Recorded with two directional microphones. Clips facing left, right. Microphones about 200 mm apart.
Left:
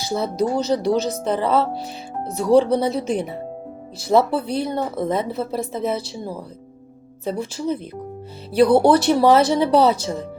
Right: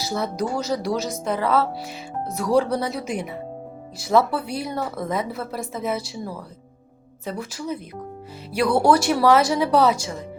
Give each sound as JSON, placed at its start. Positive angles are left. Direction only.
{"t": 0.1, "sound": "a woman's voice", "side_deg": 25}
{"t": 2.6, "sound": "a woman's voice", "side_deg": 25}
{"t": 4.1, "sound": "a woman's voice", "side_deg": 30}